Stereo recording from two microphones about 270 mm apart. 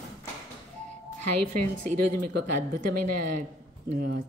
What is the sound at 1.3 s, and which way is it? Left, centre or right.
Speech, right.